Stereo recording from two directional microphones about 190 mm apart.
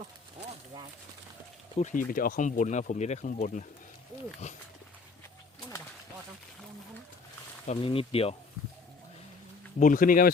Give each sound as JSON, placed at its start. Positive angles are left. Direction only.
{"t": 0.3, "sound": "a sound", "side_deg": -25}
{"t": 1.7, "sound": "speech", "side_deg": 40}
{"t": 7.7, "sound": "speech", "side_deg": 30}
{"t": 9.8, "sound": "speech", "side_deg": 45}